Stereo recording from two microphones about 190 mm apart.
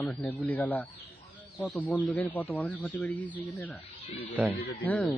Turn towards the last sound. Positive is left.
turn(degrees=10)  # may be behind; listen again after turning